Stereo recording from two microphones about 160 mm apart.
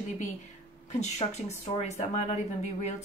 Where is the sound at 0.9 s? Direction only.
45° left (ahead or behind).